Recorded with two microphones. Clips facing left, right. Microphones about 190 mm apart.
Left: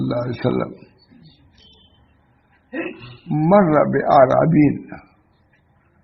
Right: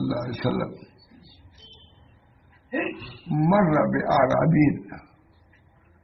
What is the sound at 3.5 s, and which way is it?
Speech, 60° left (ahead or behind).